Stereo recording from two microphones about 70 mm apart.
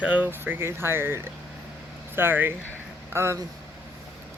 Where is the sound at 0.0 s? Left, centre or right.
Right.